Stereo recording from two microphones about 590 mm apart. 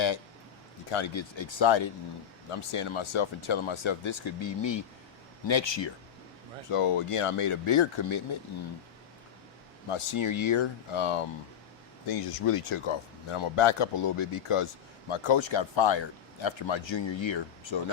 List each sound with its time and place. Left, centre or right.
0.9 s speech: left
6.7 s speech: left
9.9 s speech: left